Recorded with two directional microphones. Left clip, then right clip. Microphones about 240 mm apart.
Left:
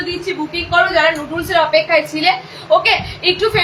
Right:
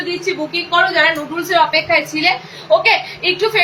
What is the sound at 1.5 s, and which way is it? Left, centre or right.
A woman's voice, centre.